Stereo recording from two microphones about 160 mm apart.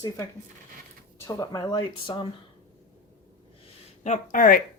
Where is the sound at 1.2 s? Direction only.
20° left (ahead or behind).